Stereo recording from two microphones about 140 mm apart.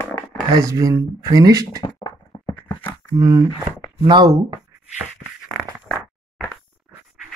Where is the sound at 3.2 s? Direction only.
20° right (ahead or behind).